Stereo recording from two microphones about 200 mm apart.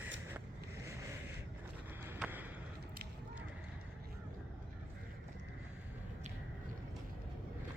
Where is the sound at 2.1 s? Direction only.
10° right (ahead or behind).